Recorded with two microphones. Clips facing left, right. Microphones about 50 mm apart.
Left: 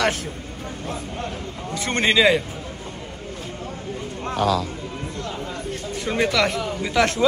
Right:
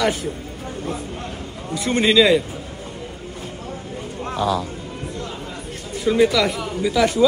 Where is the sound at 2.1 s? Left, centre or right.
Left.